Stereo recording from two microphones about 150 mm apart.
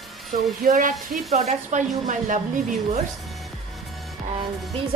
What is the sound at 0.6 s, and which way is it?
Speech, 65° right (ahead or behind).